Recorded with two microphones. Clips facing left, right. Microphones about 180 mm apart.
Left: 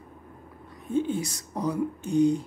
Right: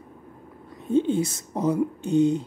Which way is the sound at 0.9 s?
25° right (ahead or behind).